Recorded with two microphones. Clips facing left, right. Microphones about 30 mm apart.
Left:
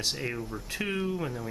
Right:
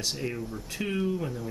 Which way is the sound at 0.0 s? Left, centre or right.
Centre.